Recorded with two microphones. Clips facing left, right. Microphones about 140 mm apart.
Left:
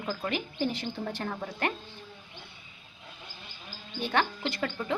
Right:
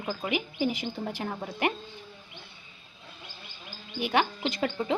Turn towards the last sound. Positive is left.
turn(degrees=-20)  # may be behind; listen again after turning